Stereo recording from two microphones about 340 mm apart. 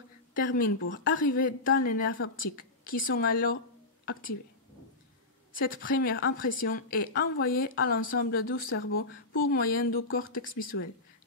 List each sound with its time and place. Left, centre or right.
0.4 s a woman's voice: left
5.8 s a woman's voice: left